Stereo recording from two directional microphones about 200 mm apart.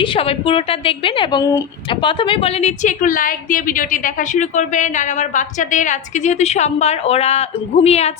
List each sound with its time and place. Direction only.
0.0 s a woman's voice: 25° left (ahead or behind)